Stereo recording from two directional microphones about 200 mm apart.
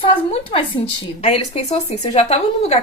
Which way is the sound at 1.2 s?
30° left (ahead or behind).